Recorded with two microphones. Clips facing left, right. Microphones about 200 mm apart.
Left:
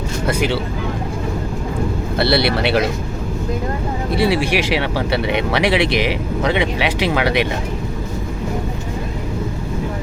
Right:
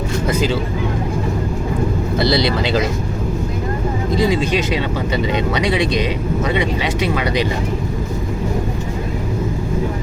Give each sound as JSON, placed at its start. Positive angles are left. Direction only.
{"t": 2.1, "sound": "speech", "side_deg": 60}
{"t": 4.1, "sound": "speech", "side_deg": 75}